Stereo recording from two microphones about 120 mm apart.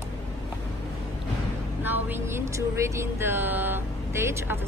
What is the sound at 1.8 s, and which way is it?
Speech, 15° right (ahead or behind).